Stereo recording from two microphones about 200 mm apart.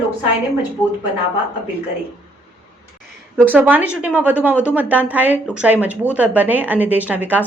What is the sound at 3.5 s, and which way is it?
A woman's voice, 10° right (ahead or behind).